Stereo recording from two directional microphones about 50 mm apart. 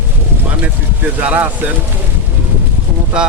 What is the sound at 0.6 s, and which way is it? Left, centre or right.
Vehicle, right.